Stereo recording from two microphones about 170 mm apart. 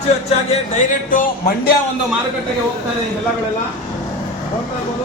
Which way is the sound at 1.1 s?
55° left (ahead or behind).